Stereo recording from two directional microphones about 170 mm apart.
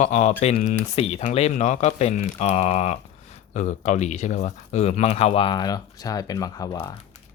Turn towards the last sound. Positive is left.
turn(degrees=20)  # may be behind; listen again after turning